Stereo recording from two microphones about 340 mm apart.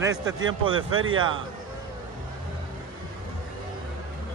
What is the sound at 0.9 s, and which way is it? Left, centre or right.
Speech, right.